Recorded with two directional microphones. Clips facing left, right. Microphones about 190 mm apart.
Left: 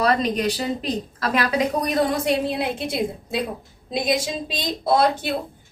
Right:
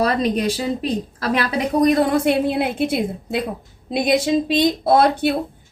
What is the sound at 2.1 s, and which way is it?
Speech, 60° right (ahead or behind).